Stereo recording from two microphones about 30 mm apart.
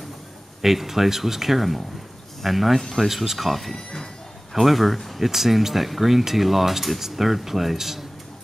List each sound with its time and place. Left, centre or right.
0.6 s speech: centre
3.7 s a sound: left
4.6 s speech: centre